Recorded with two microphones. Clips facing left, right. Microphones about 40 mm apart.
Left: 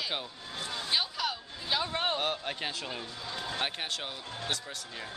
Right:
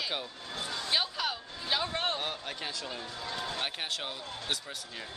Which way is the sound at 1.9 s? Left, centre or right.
Centre.